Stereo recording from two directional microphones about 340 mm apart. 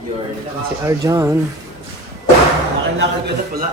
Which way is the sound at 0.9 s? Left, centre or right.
Centre.